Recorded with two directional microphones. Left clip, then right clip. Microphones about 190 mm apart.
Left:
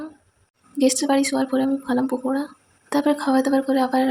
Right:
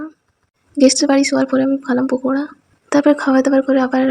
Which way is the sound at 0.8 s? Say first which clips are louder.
Right 7 dB; 25° right (ahead or behind).